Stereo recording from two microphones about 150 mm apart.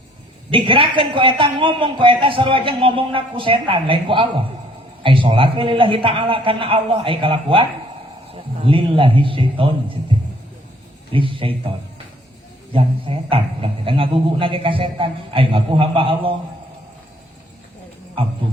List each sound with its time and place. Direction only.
0.5 s a man's voice: 35° right (ahead or behind)
11.1 s a man's voice: 35° right (ahead or behind)
12.7 s a man's voice: 35° right (ahead or behind)